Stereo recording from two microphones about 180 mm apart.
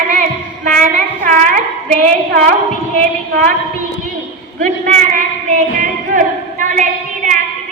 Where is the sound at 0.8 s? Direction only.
45° right (ahead or behind).